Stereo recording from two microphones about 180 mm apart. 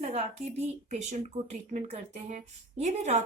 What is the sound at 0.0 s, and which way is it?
Speech, 35° right (ahead or behind).